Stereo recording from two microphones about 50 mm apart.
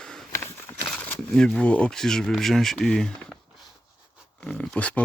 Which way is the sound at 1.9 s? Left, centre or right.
Centre.